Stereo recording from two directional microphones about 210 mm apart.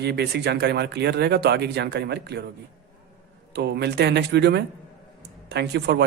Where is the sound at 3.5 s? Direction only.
55° right (ahead or behind).